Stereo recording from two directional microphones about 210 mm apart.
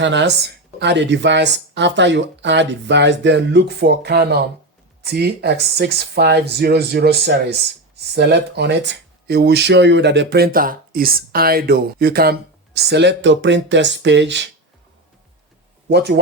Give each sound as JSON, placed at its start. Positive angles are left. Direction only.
{"t": 0.0, "sound": "speech", "side_deg": -60}
{"t": 15.9, "sound": "speech", "side_deg": -50}